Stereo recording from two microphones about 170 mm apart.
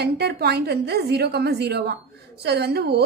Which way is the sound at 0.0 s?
75° right (ahead or behind).